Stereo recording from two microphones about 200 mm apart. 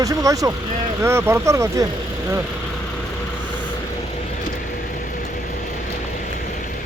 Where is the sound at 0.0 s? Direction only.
15° right (ahead or behind).